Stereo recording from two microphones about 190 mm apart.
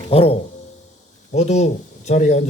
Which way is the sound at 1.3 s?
35° left (ahead or behind).